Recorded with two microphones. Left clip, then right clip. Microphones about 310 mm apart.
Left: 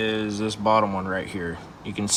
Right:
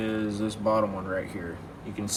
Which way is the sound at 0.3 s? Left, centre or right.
Left.